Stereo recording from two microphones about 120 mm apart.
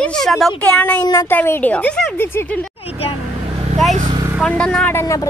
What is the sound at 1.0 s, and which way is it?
Speech, 35° left (ahead or behind).